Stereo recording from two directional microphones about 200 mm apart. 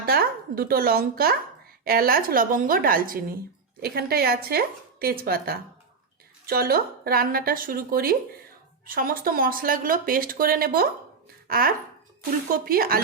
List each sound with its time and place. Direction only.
0.0 s speech: 50° right (ahead or behind)